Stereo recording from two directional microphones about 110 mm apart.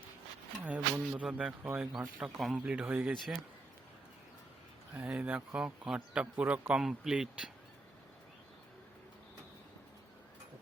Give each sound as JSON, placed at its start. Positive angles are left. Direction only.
{"t": 0.6, "sound": "a sound", "side_deg": -10}
{"t": 1.6, "sound": "speech", "side_deg": -15}
{"t": 4.9, "sound": "speech", "side_deg": -15}